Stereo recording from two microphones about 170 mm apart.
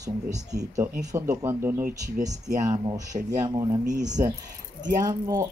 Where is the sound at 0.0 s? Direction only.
20° right (ahead or behind).